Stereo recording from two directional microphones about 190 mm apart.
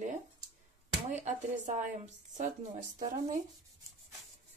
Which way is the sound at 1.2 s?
45° right (ahead or behind).